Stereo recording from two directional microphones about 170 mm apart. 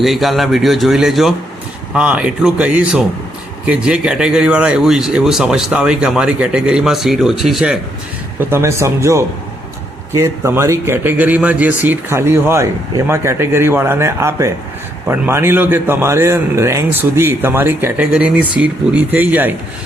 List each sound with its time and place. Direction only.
0.0 s a man's voice: centre (ahead or behind)
8.4 s a man's voice: 15° right (ahead or behind)